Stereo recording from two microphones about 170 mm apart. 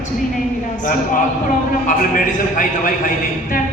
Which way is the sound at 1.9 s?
55° left (ahead or behind).